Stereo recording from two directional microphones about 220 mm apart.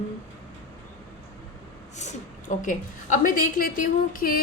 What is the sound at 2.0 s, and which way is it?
A woman's voice, 35° left (ahead or behind).